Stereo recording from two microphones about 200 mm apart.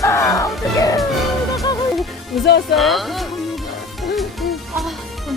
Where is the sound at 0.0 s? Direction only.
15° left (ahead or behind).